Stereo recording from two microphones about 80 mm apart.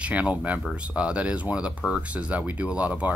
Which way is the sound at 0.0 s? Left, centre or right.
Centre.